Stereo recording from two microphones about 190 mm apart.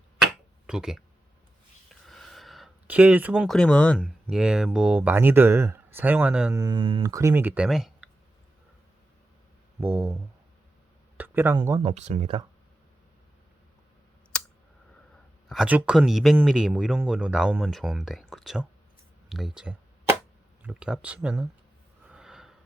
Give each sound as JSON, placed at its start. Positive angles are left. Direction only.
{"t": 0.7, "sound": "speech", "side_deg": -5}
{"t": 1.9, "sound": "a sound", "side_deg": 0}
{"t": 4.0, "sound": "speech", "side_deg": -5}
{"t": 6.5, "sound": "speech", "side_deg": -20}
{"t": 7.0, "sound": "speech", "side_deg": -15}
{"t": 9.8, "sound": "speech", "side_deg": -10}
{"t": 11.2, "sound": "a sound", "side_deg": -10}
{"t": 11.8, "sound": "speech", "side_deg": -35}
{"t": 15.4, "sound": "speech", "side_deg": -5}
{"t": 19.3, "sound": "a sound", "side_deg": 0}
{"t": 20.6, "sound": "speech", "side_deg": -5}
{"t": 22.1, "sound": "a sound", "side_deg": -5}